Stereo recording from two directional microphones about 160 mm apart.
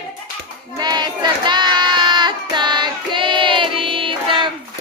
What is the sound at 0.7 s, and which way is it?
Child singing, 25° right (ahead or behind).